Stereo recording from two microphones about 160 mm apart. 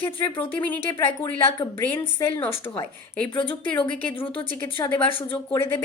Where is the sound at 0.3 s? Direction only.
15° left (ahead or behind).